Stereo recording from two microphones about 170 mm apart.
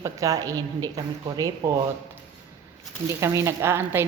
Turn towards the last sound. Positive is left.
turn(degrees=-15)  # may be behind; listen again after turning